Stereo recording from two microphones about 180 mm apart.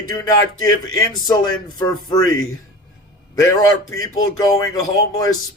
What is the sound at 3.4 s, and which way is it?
Speech, 20° left (ahead or behind).